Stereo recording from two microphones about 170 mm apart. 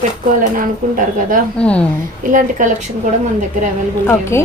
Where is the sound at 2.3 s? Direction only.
50° right (ahead or behind).